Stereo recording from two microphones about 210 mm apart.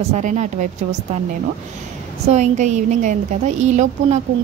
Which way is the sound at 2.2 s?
35° right (ahead or behind).